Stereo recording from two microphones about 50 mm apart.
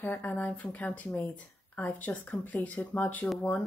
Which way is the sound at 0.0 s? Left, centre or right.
Left.